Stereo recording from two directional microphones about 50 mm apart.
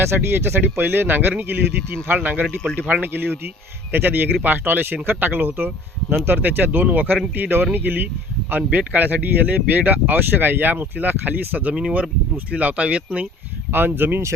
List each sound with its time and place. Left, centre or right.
0.0 s speech: right
11.7 s speech: centre
12.5 s speech: right
13.7 s speech: right